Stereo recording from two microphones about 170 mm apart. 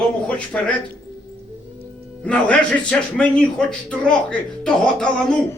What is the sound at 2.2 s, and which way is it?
A man's voice, 5° left (ahead or behind).